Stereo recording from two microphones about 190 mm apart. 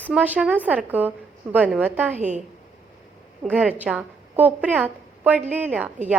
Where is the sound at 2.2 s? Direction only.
40° right (ahead or behind).